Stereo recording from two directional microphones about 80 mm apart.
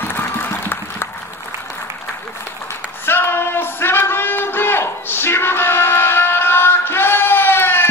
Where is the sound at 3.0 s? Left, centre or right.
Left.